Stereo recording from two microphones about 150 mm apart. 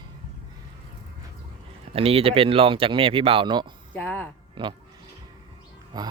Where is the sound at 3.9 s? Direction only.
10° left (ahead or behind).